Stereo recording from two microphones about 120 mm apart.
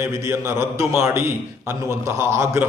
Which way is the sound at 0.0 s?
20° right (ahead or behind).